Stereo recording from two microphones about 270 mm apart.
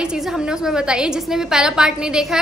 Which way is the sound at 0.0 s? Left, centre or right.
Centre.